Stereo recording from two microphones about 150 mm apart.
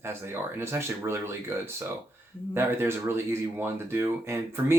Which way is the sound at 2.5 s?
15° right (ahead or behind).